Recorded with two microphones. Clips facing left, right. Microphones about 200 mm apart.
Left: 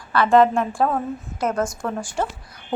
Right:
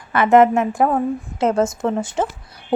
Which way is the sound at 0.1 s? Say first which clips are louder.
Right 3 dB; 20° right (ahead or behind).